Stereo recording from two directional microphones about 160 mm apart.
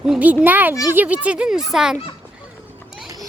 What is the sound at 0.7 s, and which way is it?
Speech, 20° left (ahead or behind).